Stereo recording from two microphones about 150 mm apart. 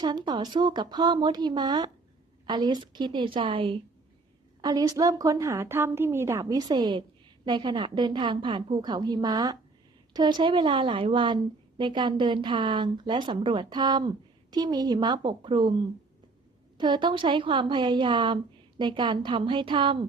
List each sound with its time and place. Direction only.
0.0 s speech: 30° right (ahead or behind)
4.6 s speech: 25° right (ahead or behind)
16.7 s speech: 30° right (ahead or behind)